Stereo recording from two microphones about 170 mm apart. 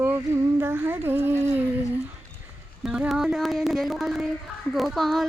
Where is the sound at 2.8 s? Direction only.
5° right (ahead or behind).